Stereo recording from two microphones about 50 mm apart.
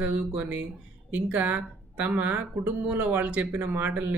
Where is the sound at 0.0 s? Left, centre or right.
Right.